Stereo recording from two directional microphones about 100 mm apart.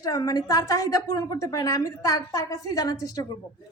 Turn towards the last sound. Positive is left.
turn(degrees=40)  # may be behind; listen again after turning